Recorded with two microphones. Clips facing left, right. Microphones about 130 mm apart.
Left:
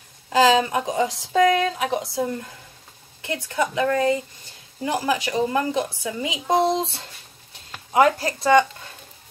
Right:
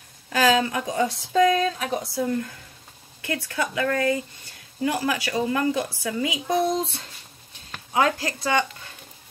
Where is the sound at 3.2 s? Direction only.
20° left (ahead or behind).